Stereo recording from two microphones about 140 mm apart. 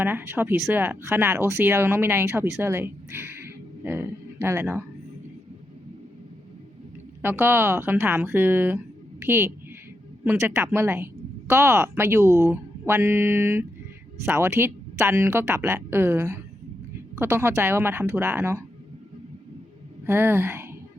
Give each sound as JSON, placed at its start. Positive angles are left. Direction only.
{"t": 0.0, "sound": "speech", "side_deg": -15}
{"t": 7.2, "sound": "a woman's voice", "side_deg": -15}
{"t": 20.1, "sound": "speech", "side_deg": -15}